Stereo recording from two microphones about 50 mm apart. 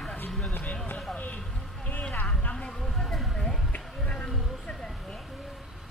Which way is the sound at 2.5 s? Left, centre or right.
Centre.